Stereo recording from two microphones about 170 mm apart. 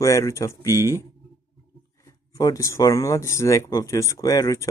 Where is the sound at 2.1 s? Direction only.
20° left (ahead or behind).